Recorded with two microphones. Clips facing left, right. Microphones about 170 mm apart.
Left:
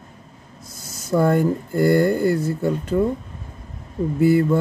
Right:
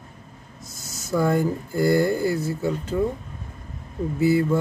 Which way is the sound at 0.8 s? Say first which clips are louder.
Left 4 dB; 55° left (ahead or behind).